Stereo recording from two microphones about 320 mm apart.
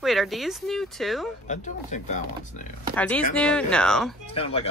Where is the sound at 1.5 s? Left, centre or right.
Left.